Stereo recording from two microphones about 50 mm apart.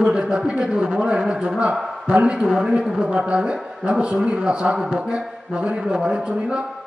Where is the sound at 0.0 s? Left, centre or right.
Centre.